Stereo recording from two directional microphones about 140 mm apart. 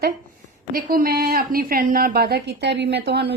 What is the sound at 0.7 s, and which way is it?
Speech, 90° right.